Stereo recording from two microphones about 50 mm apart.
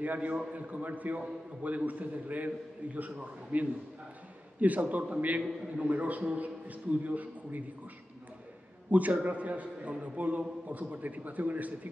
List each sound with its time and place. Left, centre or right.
0.0 s a man's voice: right
8.9 s a man's voice: right